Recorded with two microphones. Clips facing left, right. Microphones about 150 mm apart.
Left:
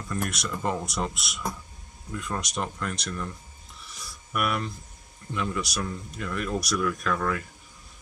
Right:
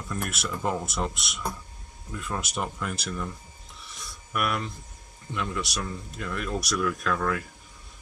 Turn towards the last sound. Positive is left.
turn(degrees=0)  # may be behind; listen again after turning